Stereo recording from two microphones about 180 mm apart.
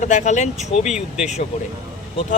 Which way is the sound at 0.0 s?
40° left (ahead or behind).